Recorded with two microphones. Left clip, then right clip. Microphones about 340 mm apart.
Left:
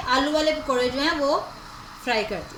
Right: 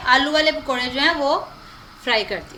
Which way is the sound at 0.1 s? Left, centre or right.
Right.